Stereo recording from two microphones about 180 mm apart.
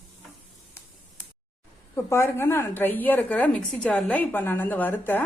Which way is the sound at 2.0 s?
15° left (ahead or behind).